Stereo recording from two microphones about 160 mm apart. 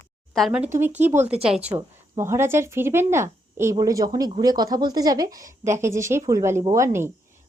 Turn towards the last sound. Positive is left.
turn(degrees=-15)  # may be behind; listen again after turning